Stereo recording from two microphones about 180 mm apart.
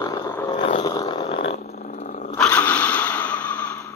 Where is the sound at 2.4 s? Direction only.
10° left (ahead or behind).